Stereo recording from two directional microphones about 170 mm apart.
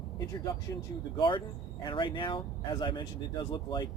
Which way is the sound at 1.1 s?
30° left (ahead or behind).